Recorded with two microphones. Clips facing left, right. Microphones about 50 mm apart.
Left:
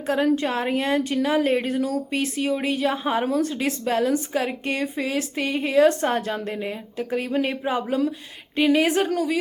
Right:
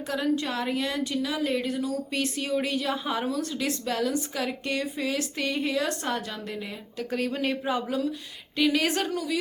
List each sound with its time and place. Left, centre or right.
0.3 s a woman's voice: left
2.0 s a woman's voice: left
9.0 s a woman's voice: left